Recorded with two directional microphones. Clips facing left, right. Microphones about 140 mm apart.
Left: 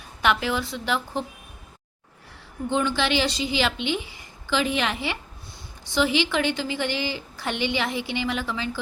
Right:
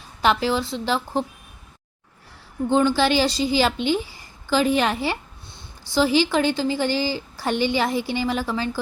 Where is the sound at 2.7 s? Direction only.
35° right (ahead or behind).